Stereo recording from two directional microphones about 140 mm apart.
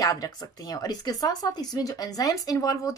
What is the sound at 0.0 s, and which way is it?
A woman's voice, 25° left (ahead or behind).